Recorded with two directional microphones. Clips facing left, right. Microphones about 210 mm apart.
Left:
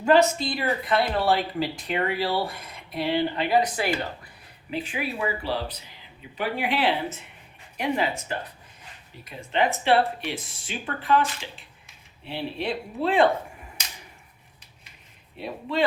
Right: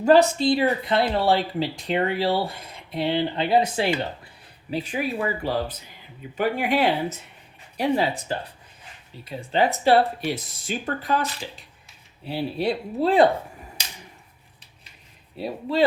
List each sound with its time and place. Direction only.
0.0 s speech: 35° right (ahead or behind)
4.7 s speech: 40° right (ahead or behind)
7.8 s speech: 35° right (ahead or behind)
15.4 s speech: 35° right (ahead or behind)